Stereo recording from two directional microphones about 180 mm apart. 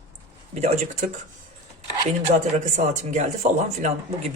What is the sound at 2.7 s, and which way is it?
Speech, 40° right (ahead or behind).